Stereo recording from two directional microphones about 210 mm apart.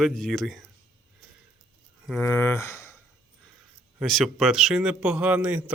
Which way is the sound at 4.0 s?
Centre (ahead or behind).